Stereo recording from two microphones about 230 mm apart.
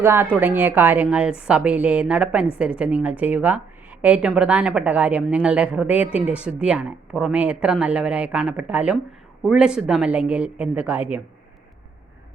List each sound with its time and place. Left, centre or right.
0.0 s a woman's voice: centre